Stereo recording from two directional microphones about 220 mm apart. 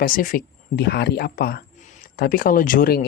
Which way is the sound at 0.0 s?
40° left (ahead or behind).